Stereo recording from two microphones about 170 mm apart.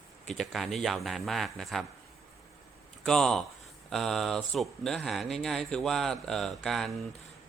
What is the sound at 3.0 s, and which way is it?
A man's voice, 5° left (ahead or behind).